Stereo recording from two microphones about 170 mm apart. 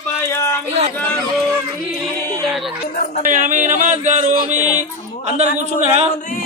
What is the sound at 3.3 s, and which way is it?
Speech, 50° right (ahead or behind).